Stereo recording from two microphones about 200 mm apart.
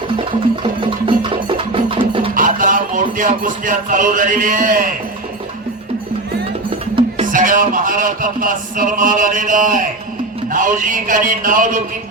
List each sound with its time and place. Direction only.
0.8 s music: 25° right (ahead or behind)
2.3 s speech: 45° right (ahead or behind)
6.9 s a man's voice: 40° right (ahead or behind)